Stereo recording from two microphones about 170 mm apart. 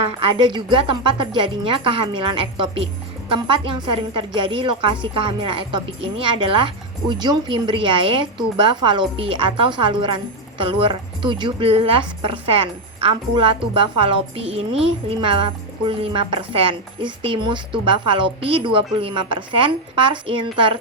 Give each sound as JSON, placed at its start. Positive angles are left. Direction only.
{"t": 0.2, "sound": "a woman's voice", "side_deg": -30}